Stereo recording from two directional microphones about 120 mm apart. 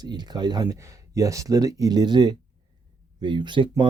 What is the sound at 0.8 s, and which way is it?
Speech, 25° right (ahead or behind).